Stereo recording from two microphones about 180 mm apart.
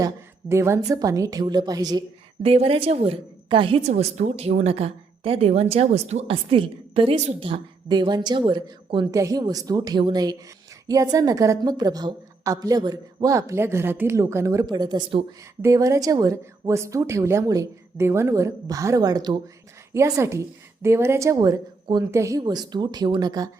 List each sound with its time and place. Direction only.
0.0 s a woman's voice: 15° right (ahead or behind)